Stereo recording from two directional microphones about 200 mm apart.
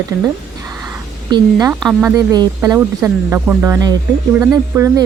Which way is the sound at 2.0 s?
15° right (ahead or behind).